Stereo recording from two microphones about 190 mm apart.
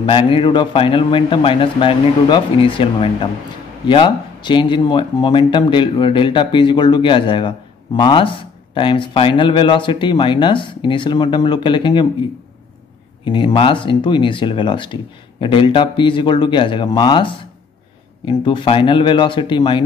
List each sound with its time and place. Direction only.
0.0 s speech: 25° left (ahead or behind)
13.2 s speech: 25° left (ahead or behind)